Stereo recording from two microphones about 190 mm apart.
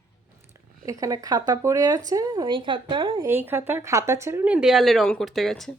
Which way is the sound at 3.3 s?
10° right (ahead or behind).